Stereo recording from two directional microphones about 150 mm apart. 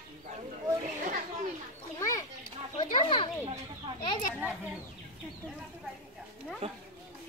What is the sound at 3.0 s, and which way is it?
Children playing, 35° left (ahead or behind).